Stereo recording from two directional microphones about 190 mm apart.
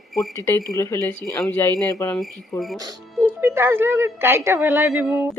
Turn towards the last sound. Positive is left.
turn(degrees=-10)  # may be behind; listen again after turning